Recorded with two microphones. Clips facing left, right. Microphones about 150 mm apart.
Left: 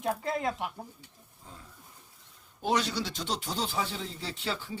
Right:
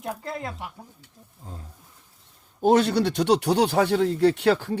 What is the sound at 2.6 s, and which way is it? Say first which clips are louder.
Speech: right 10 dB; 50° right (ahead or behind).